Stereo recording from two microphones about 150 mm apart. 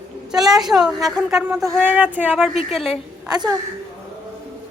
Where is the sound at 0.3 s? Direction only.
5° right (ahead or behind).